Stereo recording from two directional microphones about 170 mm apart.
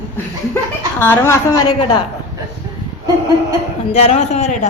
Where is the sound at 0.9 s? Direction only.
15° left (ahead or behind).